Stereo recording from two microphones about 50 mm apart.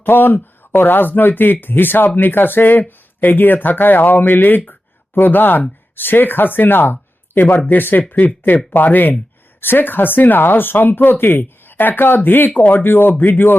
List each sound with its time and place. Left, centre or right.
0.0 s speech: left